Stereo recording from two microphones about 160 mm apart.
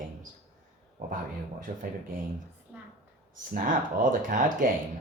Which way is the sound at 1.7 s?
60° right (ahead or behind).